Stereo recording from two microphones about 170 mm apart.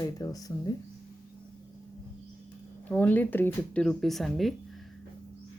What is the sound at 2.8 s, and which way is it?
A woman's voice, 10° left (ahead or behind).